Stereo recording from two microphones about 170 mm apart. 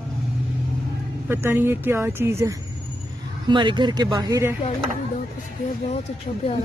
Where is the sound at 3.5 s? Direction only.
30° right (ahead or behind).